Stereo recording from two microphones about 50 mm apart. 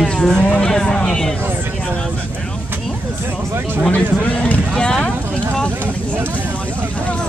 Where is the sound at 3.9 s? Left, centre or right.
Left.